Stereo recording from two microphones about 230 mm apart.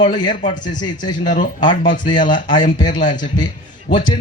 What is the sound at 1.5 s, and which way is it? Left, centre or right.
A man's voice, left.